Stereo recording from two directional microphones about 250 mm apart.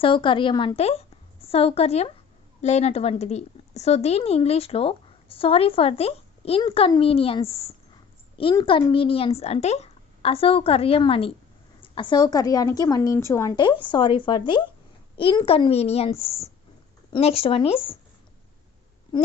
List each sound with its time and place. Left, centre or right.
0.0 s a woman's voice: centre